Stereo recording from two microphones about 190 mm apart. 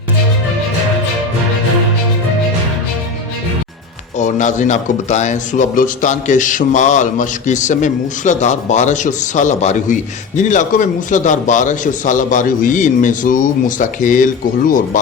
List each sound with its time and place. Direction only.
4.2 s speech: 40° left (ahead or behind)